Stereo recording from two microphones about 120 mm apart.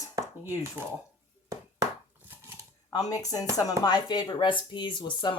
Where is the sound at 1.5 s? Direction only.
25° right (ahead or behind).